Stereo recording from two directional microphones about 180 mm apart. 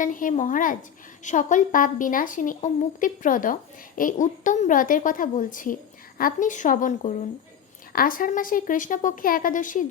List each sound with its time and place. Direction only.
0.0 s a woman's voice: 45° left (ahead or behind)